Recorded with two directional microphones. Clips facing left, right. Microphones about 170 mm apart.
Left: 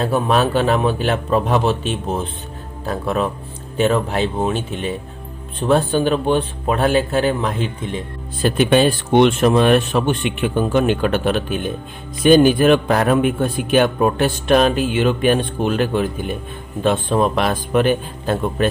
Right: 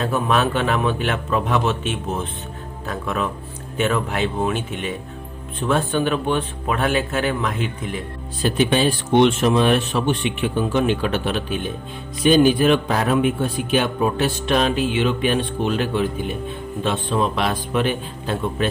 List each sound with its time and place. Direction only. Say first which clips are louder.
0.0 s speech: left 3 dB; 35° left (ahead or behind)
8.4 s a man's voice: left 4 dB; 55° left (ahead or behind)